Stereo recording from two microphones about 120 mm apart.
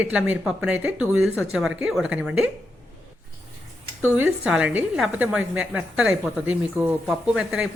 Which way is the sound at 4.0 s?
15° right (ahead or behind).